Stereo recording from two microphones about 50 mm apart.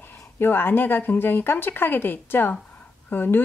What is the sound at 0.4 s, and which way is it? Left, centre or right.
A woman's voice, left.